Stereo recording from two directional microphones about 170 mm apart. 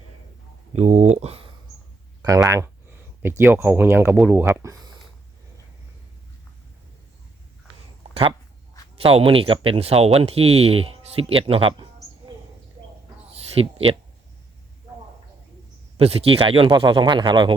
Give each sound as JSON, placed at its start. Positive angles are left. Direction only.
{"t": 0.7, "sound": "speech", "side_deg": -40}
{"t": 2.2, "sound": "speech", "side_deg": -20}
{"t": 9.0, "sound": "speech", "side_deg": -35}
{"t": 13.3, "sound": "a sound", "side_deg": -35}
{"t": 16.0, "sound": "speech", "side_deg": -35}